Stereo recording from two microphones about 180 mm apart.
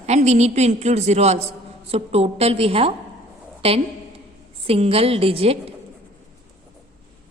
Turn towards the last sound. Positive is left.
turn(degrees=-35)  # may be behind; listen again after turning